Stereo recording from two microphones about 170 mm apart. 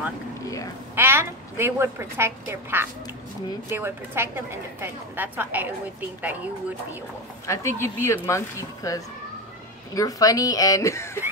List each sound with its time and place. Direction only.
0.9 s a woman's voice: 15° right (ahead or behind)
7.4 s a woman's voice: 15° left (ahead or behind)